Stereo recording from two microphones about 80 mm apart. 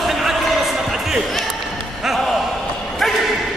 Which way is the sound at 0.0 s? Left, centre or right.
Centre.